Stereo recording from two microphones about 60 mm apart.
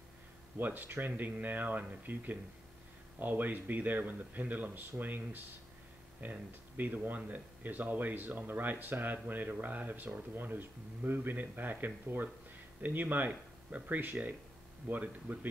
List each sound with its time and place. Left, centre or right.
0.6 s speech: right